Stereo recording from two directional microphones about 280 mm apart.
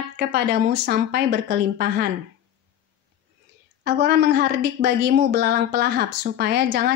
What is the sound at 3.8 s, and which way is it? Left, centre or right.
A woman's voice, right.